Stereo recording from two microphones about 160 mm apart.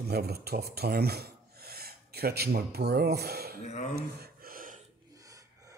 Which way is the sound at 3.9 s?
75° right (ahead or behind).